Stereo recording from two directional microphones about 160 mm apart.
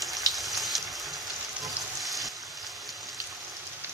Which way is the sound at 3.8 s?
15° right (ahead or behind).